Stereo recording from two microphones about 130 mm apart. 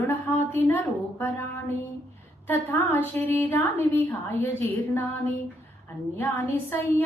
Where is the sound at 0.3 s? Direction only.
15° left (ahead or behind).